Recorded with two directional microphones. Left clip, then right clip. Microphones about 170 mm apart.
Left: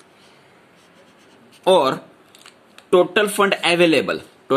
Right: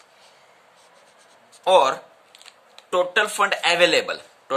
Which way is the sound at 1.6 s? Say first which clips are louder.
Left 1 dB; 15° left (ahead or behind).